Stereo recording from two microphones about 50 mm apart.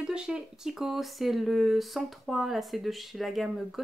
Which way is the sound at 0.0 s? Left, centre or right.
Centre.